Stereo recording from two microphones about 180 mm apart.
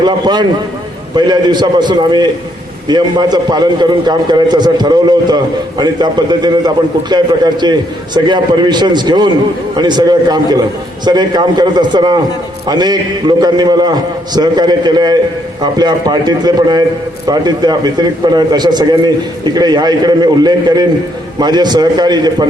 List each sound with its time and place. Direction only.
0.0 s a man's voice: 25° right (ahead or behind)